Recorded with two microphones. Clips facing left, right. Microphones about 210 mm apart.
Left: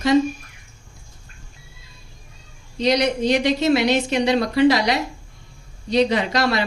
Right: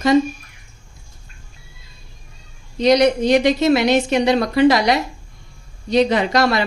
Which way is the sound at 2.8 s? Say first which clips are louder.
Right 5 dB; 45° right (ahead or behind).